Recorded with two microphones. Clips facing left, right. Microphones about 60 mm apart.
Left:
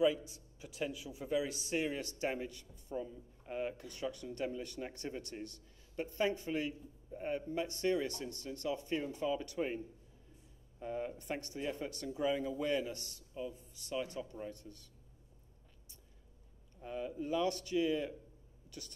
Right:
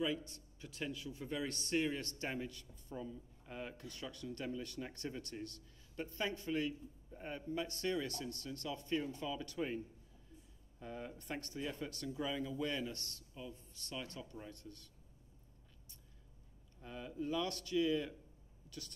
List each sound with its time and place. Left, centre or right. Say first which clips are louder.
0.0 s a man's voice: left 7 dB; centre
10.8 s a man's voice: left 7 dB; left
16.8 s speech: left 3 dB; centre